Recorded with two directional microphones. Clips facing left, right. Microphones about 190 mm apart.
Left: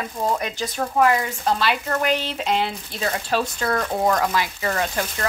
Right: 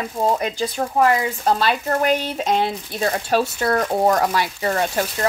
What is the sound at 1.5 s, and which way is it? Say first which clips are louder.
Speech: right 2 dB; 40° right (ahead or behind).